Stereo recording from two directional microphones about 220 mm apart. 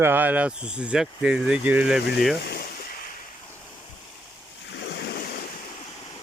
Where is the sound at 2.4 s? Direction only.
45° left (ahead or behind).